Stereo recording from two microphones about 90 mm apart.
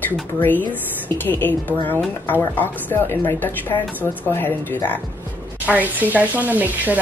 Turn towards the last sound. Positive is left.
turn(degrees=-20)  # may be behind; listen again after turning